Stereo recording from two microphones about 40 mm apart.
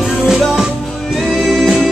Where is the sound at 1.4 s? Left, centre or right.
Centre.